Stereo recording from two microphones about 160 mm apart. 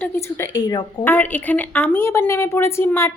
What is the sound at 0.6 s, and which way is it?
Speech, 30° left (ahead or behind).